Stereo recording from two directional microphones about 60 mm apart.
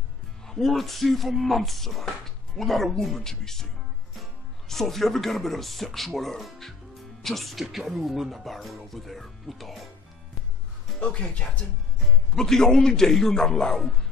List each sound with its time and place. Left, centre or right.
0.5 s speech: centre
11.0 s speech: centre
12.4 s a man's voice: centre